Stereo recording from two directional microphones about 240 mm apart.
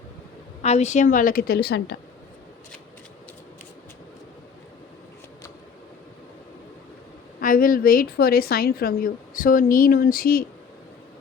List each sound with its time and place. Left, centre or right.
0.6 s a woman's voice: left
7.4 s a woman's voice: left